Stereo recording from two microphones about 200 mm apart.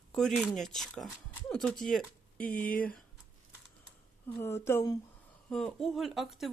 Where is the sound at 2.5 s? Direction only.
45° left (ahead or behind).